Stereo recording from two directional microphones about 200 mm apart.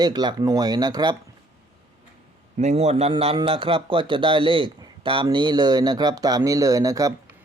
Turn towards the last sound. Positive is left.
turn(degrees=-15)  # may be behind; listen again after turning